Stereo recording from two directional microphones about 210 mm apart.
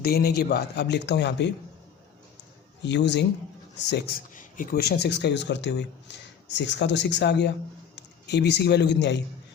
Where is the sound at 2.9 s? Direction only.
55° left (ahead or behind).